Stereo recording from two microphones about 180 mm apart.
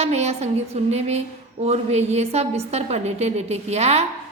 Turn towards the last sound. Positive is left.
turn(degrees=-35)  # may be behind; listen again after turning